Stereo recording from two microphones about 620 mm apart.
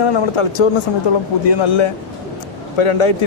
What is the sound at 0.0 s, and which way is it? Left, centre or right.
Speech, left.